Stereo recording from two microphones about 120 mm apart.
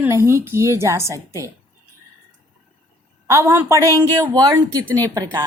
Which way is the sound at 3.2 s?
25° right (ahead or behind).